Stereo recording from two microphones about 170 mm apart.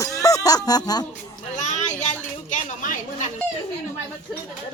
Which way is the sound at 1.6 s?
45° left (ahead or behind).